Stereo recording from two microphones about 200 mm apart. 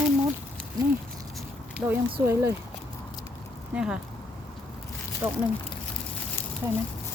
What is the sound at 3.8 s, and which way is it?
Speech, 5° right (ahead or behind).